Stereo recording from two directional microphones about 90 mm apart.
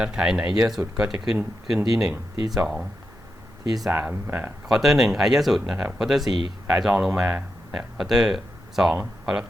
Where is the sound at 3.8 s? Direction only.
15° right (ahead or behind).